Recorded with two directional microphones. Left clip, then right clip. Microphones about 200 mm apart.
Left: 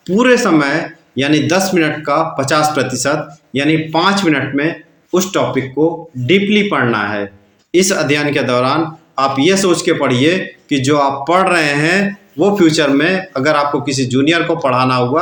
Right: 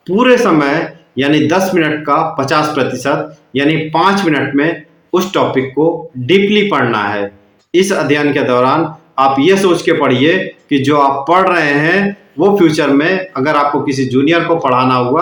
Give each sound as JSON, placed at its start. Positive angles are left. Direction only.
{"t": 0.0, "sound": "speech", "side_deg": 35}